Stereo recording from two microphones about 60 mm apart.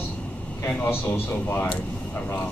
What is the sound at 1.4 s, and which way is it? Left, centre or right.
Speech, left.